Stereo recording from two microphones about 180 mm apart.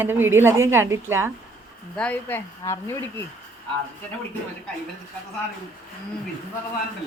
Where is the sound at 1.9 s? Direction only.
5° left (ahead or behind).